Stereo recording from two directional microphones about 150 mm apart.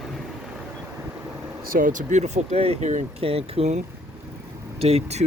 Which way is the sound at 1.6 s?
70° right (ahead or behind).